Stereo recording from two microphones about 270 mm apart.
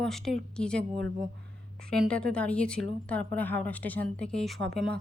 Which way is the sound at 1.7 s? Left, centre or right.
Centre.